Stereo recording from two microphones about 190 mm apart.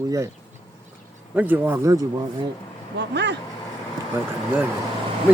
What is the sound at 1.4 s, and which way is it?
Speech, 10° right (ahead or behind).